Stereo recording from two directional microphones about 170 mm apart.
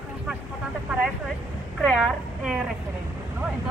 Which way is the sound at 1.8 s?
Centre (ahead or behind).